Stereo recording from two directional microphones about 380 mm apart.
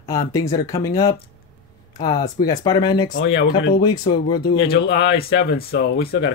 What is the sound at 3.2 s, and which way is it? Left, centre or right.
Speech, left.